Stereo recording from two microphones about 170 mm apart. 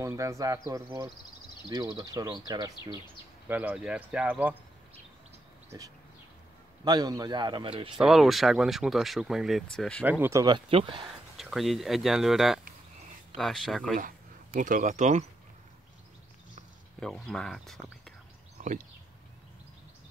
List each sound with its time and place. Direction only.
0.0 s speech: 20° right (ahead or behind)
3.4 s speech: 10° right (ahead or behind)
6.8 s speech: 25° right (ahead or behind)
8.0 s speech: centre (ahead or behind)
10.0 s speech: 10° right (ahead or behind)
10.4 s speech: 30° right (ahead or behind)
11.3 s speech: centre (ahead or behind)
13.9 s speech: 50° right (ahead or behind)
17.0 s speech: 5° left (ahead or behind)
18.6 s a sound: 50° right (ahead or behind)